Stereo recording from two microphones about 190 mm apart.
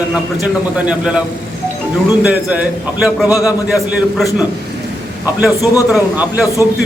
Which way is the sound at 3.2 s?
20° left (ahead or behind).